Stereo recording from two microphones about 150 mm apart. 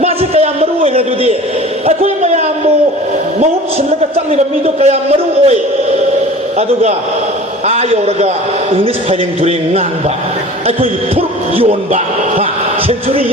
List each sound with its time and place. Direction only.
0.0 s a man's voice: 45° right (ahead or behind)
4.1 s a man's voice: 45° right (ahead or behind)
7.7 s a man's voice: 45° right (ahead or behind)